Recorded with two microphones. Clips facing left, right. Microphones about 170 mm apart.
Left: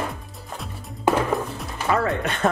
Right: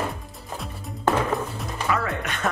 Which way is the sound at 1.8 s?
30° left (ahead or behind).